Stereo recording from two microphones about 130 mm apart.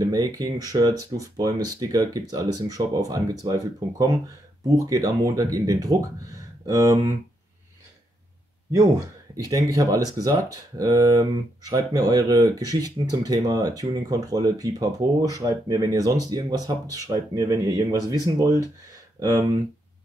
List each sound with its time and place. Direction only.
0.0 s speech: 25° right (ahead or behind)
9.5 s speech: 25° right (ahead or behind)